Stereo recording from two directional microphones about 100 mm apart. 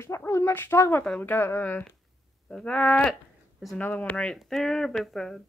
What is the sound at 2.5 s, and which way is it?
Speech, 10° left (ahead or behind).